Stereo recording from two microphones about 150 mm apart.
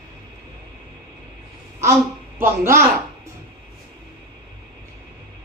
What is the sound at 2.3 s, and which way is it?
Speech, 15° right (ahead or behind).